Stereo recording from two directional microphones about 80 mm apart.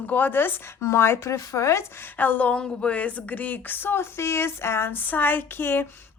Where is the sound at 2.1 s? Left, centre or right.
Left.